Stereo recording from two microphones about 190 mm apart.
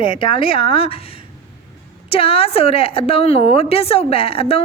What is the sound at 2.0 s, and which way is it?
A woman's voice, 30° left (ahead or behind).